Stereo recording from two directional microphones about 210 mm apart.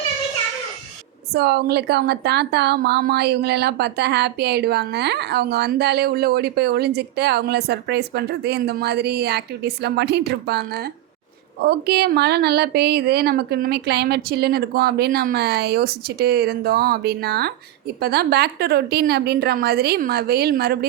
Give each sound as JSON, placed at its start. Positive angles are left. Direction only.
{"t": 1.3, "sound": "a woman's voice", "side_deg": -50}